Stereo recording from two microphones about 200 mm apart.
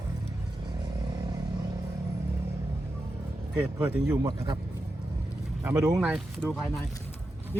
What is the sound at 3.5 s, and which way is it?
A man's voice, 5° right (ahead or behind).